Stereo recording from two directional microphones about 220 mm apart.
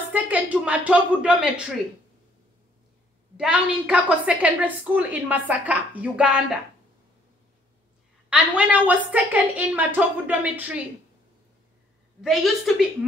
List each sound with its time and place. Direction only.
0.1 s a woman's voice: 5° right (ahead or behind)
3.3 s a woman's voice: 5° right (ahead or behind)
8.3 s a woman's voice: 5° right (ahead or behind)
12.2 s a woman's voice: centre (ahead or behind)